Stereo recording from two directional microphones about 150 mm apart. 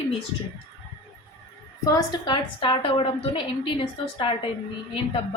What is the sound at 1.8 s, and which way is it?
A woman's voice, 25° left (ahead or behind).